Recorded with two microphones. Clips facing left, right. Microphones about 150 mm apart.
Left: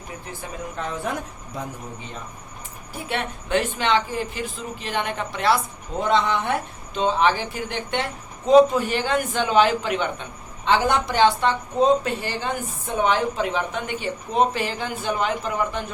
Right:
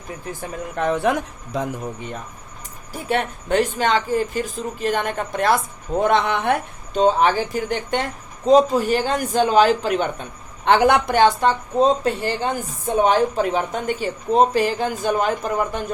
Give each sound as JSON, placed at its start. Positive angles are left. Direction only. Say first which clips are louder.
{"t": 0.8, "sound": "speech", "louder": "right 10 dB", "side_deg": -65}
{"t": 1.5, "sound": "a man's voice", "louder": "right 8 dB", "side_deg": -90}
{"t": 3.1, "sound": "speech", "louder": "right 4 dB", "side_deg": -40}
{"t": 6.9, "sound": "speech", "louder": "right 4 dB", "side_deg": -40}
{"t": 10.7, "sound": "speech", "louder": "right 5 dB", "side_deg": -60}